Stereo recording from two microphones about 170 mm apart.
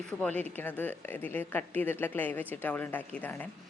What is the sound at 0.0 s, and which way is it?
A woman's voice, 5° left (ahead or behind).